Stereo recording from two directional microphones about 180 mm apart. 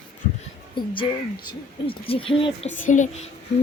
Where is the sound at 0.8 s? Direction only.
25° left (ahead or behind).